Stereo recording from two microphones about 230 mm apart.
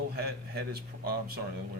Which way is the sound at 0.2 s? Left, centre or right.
Right.